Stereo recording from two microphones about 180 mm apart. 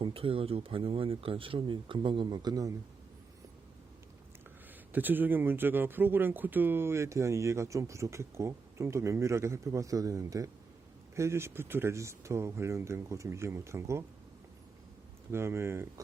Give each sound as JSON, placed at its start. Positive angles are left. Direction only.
{"t": 0.0, "sound": "speech", "side_deg": -30}
{"t": 4.9, "sound": "speech", "side_deg": -10}
{"t": 15.3, "sound": "speech", "side_deg": -15}